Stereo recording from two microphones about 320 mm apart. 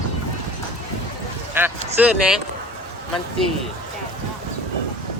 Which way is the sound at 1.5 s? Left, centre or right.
Centre.